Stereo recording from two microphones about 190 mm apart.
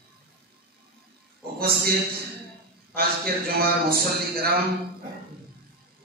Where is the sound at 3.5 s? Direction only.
50° right (ahead or behind).